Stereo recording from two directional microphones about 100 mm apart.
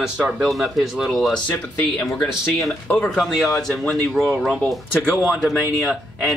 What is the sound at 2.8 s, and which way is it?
Speech, 15° left (ahead or behind).